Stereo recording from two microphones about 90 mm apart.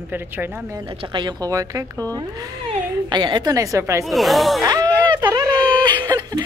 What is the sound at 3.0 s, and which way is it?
Speech, 55° right (ahead or behind).